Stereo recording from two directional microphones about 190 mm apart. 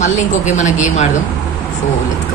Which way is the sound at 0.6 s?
40° left (ahead or behind).